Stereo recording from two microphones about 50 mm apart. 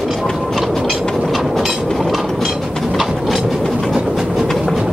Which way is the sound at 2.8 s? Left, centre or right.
Centre.